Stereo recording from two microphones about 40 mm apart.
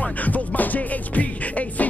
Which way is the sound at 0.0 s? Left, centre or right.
Left.